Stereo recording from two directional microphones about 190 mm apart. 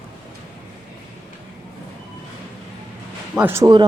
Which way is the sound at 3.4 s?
10° right (ahead or behind).